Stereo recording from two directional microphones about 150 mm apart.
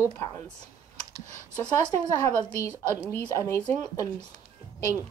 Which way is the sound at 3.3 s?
20° left (ahead or behind).